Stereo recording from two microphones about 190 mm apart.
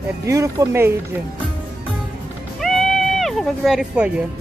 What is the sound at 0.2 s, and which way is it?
Speech, 15° right (ahead or behind).